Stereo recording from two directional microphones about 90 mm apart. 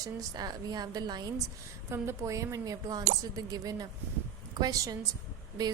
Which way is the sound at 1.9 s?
30° right (ahead or behind).